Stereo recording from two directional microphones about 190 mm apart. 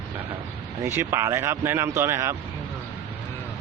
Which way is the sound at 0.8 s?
10° right (ahead or behind).